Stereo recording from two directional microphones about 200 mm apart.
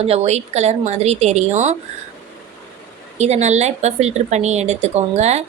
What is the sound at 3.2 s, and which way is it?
Speech, 35° right (ahead or behind).